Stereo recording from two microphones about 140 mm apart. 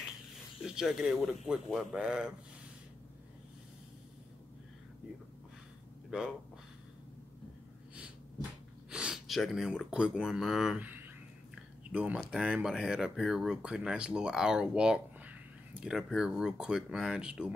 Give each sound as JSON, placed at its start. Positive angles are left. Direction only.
{"t": 0.6, "sound": "speech", "side_deg": -5}
{"t": 6.0, "sound": "speech", "side_deg": -5}
{"t": 8.9, "sound": "speech", "side_deg": -5}
{"t": 11.9, "sound": "speech", "side_deg": -10}